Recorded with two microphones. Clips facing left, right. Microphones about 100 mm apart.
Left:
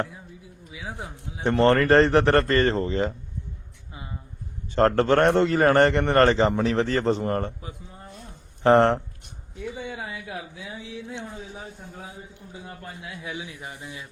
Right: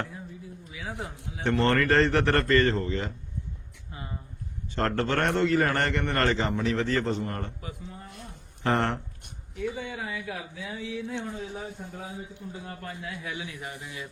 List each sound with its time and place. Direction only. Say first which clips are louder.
0.7 s a man's voice: left 1 dB; 20° left (ahead or behind)
1.6 s a man's voice: left 6 dB; 30° left (ahead or behind)
4.7 s a man's voice: left 8 dB; 35° left (ahead or behind)
6.4 s speech: left 6 dB; 50° left (ahead or behind)
6.8 s a man's voice: left 4 dB; 40° left (ahead or behind)
8.6 s a man's voice: left 9 dB; 35° left (ahead or behind)
10.1 s speech: even; 25° left (ahead or behind)
11.3 s a man's voice: right 3 dB; 5° left (ahead or behind)
12.6 s speech: left 1 dB; 20° left (ahead or behind)